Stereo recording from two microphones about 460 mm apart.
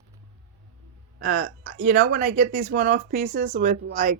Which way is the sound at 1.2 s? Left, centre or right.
Centre.